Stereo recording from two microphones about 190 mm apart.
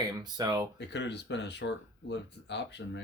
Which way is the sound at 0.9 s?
65° left (ahead or behind).